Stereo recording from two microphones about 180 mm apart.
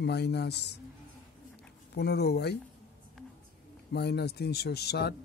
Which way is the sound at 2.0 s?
65° left (ahead or behind).